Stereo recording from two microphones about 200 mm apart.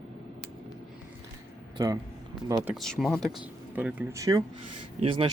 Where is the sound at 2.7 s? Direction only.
Centre (ahead or behind).